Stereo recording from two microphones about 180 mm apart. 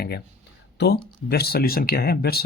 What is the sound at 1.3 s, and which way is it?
Speech, 60° left (ahead or behind).